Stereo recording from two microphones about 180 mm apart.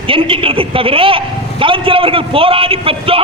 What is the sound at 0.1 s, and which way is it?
A woman's voice, 30° right (ahead or behind).